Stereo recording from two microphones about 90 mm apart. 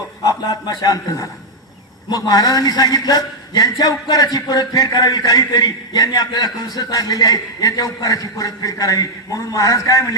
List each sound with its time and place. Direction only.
0.2 s a man's voice: 50° left (ahead or behind)